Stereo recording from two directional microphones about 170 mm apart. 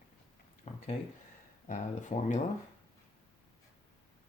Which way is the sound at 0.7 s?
40° left (ahead or behind).